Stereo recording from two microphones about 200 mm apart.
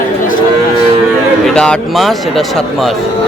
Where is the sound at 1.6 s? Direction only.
Centre (ahead or behind).